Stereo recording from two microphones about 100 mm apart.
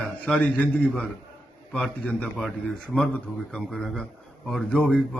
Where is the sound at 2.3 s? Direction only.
5° left (ahead or behind).